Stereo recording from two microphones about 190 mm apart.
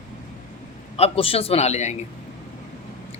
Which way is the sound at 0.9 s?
30° left (ahead or behind).